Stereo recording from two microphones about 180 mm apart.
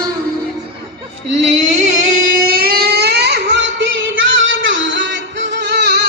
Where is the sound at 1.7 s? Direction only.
45° right (ahead or behind).